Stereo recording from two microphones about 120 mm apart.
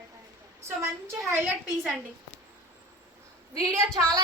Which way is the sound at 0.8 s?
20° right (ahead or behind).